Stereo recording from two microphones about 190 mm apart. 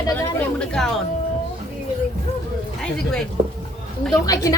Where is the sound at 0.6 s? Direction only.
5° left (ahead or behind).